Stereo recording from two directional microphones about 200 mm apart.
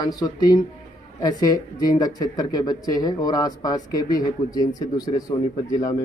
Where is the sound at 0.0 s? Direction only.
20° left (ahead or behind).